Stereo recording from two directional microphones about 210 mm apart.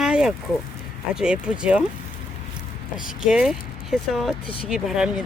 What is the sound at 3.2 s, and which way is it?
Speech, 5° right (ahead or behind).